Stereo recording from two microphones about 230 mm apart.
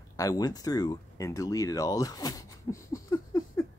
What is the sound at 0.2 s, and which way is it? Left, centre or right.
Speech, centre.